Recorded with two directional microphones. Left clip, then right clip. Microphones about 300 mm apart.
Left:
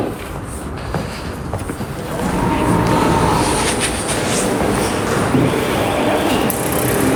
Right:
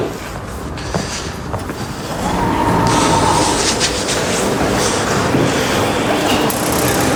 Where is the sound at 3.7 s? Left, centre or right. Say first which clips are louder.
Right 3 dB; centre.